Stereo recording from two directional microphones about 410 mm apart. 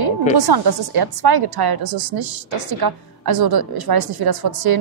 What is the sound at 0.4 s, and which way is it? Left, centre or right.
A woman's voice, right.